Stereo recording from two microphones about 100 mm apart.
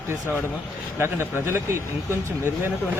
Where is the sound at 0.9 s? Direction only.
25° right (ahead or behind).